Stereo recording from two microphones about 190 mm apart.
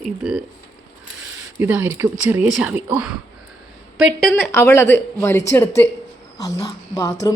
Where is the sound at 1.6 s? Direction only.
10° right (ahead or behind).